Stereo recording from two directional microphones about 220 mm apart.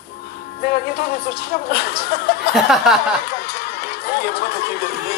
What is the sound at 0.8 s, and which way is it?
Music, 45° left (ahead or behind).